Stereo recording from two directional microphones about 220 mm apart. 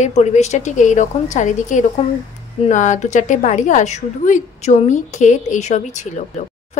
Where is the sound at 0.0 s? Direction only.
30° left (ahead or behind).